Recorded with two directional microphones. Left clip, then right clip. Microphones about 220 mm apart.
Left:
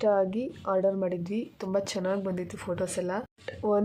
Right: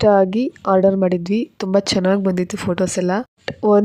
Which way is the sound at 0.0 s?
45° right (ahead or behind).